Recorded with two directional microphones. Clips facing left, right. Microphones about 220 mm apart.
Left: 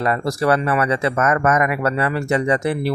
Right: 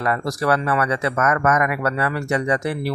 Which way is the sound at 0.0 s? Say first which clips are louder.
Left 3 dB; 25° left (ahead or behind).